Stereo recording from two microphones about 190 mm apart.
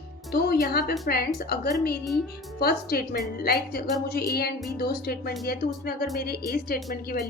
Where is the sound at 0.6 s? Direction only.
55° left (ahead or behind).